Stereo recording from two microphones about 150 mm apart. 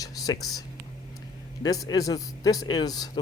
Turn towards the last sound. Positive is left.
turn(degrees=25)  # may be behind; listen again after turning